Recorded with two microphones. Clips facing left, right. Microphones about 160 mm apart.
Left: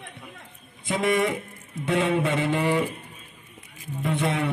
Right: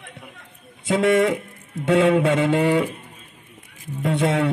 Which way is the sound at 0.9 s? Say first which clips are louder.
Right 6 dB; 75° right (ahead or behind).